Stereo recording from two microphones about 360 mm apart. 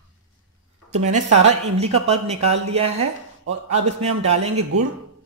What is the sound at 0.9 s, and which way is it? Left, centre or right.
A woman's voice, centre.